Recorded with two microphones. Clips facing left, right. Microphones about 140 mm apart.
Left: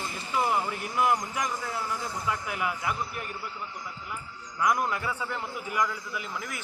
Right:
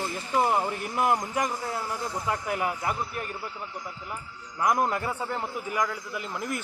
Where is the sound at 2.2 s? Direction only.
40° right (ahead or behind).